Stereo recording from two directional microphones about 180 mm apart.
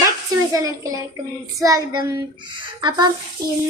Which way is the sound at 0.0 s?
20° right (ahead or behind).